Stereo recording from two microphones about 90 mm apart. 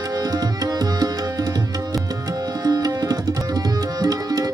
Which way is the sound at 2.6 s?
45° right (ahead or behind).